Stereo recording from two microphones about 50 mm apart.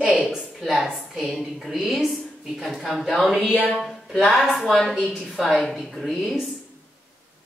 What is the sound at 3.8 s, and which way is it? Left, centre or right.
Music, centre.